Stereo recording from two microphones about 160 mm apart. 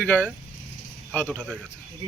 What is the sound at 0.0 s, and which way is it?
Speech, 10° left (ahead or behind).